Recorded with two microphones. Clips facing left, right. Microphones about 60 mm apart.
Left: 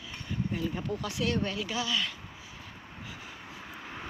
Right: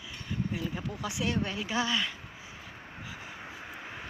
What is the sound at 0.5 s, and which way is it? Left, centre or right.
Speech, centre.